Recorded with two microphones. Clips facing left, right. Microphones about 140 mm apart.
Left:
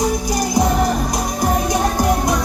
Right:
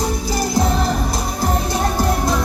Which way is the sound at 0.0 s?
15° left (ahead or behind).